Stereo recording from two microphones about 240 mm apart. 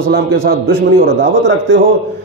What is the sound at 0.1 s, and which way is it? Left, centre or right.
A man's voice, right.